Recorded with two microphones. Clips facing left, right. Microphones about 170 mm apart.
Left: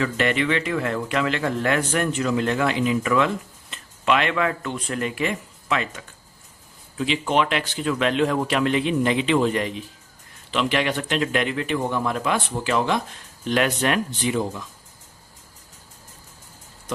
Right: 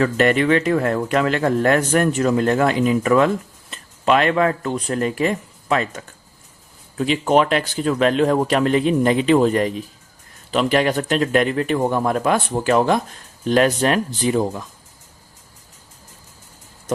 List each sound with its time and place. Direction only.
0.0 s speech: 45° right (ahead or behind)